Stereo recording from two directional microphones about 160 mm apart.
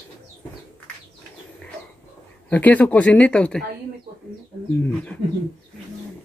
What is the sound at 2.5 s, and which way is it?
Speech, 10° left (ahead or behind).